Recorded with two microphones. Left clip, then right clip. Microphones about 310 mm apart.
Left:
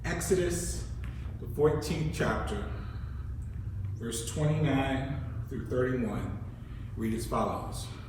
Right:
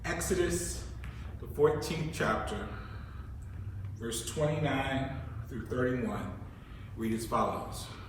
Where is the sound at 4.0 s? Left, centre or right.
Centre.